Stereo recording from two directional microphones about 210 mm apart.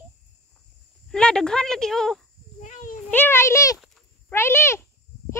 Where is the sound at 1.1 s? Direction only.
5° left (ahead or behind).